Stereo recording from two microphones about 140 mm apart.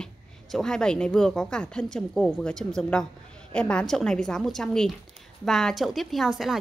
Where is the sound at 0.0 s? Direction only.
5° left (ahead or behind).